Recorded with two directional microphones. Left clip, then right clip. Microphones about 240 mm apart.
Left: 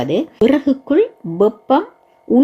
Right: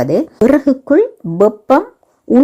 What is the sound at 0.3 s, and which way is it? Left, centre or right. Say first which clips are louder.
Speech: right 3 dB; centre.